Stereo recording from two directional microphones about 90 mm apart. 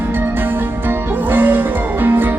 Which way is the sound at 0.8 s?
20° right (ahead or behind).